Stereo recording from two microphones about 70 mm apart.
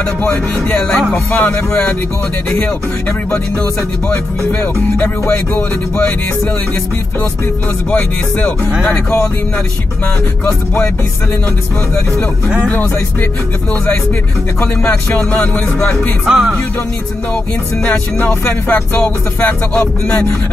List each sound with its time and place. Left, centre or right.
0.2 s music: left
4.1 s music: left
7.9 s music: left
15.0 s music: left
16.3 s music: centre
18.3 s music: left